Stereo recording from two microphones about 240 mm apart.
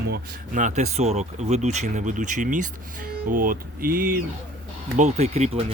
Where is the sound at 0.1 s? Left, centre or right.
Right.